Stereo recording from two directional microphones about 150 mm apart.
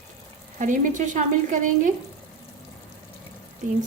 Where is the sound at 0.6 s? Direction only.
55° right (ahead or behind).